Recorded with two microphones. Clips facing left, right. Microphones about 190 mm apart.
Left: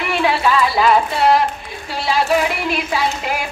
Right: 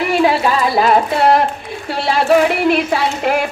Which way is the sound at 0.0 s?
40° right (ahead or behind).